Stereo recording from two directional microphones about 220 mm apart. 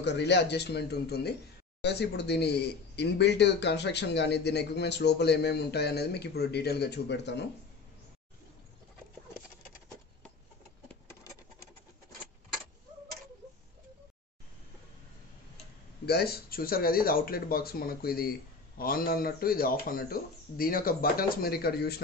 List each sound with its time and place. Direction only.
0.0 s speech: 50° left (ahead or behind)
16.1 s speech: 45° left (ahead or behind)